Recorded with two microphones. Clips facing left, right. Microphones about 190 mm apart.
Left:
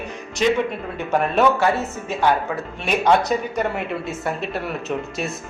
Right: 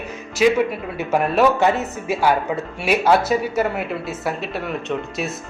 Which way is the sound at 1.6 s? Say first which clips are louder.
Right 2 dB; 20° right (ahead or behind).